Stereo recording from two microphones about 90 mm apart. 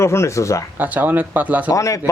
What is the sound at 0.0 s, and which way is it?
Speech, 30° left (ahead or behind).